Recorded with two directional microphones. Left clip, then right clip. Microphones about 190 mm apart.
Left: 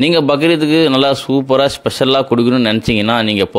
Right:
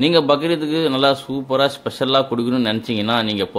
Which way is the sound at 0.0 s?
35° left (ahead or behind).